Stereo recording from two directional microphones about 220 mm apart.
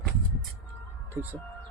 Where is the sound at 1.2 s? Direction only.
10° right (ahead or behind).